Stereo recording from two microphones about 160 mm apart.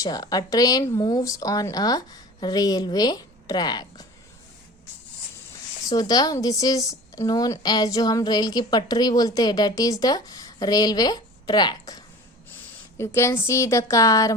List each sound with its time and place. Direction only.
0.0 s a woman's voice: 25° left (ahead or behind)
5.9 s a woman's voice: 25° left (ahead or behind)
13.1 s a woman's voice: 15° left (ahead or behind)